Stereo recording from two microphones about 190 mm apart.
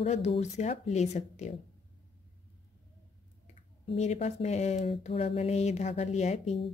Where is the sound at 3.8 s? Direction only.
35° left (ahead or behind).